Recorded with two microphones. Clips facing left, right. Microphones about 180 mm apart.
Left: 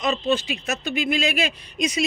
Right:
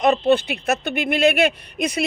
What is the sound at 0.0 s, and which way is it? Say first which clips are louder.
Speech: right 6 dB; 60° right (ahead or behind).